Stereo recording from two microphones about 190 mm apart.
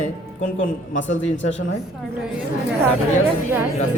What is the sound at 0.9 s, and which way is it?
Speech, 80° left.